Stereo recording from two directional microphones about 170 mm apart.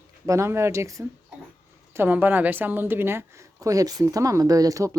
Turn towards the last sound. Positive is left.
turn(degrees=-20)  # may be behind; listen again after turning